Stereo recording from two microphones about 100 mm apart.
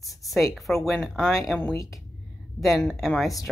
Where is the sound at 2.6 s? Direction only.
Centre (ahead or behind).